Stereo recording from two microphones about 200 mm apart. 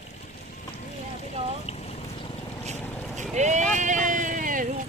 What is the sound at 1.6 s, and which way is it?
Boat, 30° left (ahead or behind).